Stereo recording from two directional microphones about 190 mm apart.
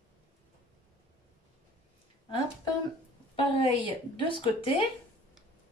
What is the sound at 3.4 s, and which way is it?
A woman's voice, 25° left (ahead or behind).